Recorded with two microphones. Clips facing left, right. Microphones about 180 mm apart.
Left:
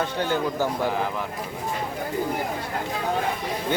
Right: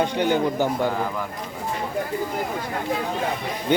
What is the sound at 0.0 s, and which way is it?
Speech, 15° right (ahead or behind).